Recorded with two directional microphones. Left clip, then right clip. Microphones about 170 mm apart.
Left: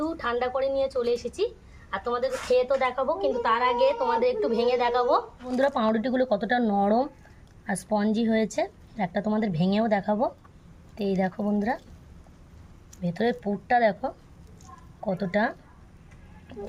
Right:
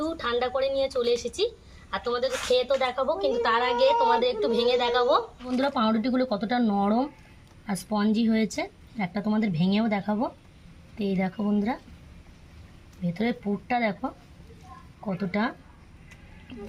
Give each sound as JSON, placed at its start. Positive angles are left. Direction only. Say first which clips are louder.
{"t": 0.0, "sound": "a woman's voice", "louder": "even", "side_deg": 5}
{"t": 13.1, "sound": "a woman's voice", "louder": "left 3 dB", "side_deg": 15}